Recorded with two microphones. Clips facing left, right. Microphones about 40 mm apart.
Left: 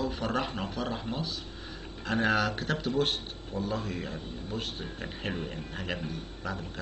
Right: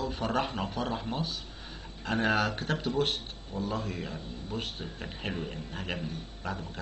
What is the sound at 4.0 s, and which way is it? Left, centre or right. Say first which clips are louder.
Speech: left 1 dB; centre.